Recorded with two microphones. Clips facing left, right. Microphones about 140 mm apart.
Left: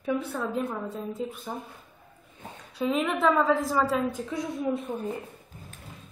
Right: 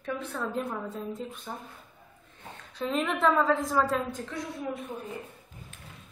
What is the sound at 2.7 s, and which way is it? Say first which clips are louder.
A woman's voice: left 3 dB; 5° left (ahead or behind).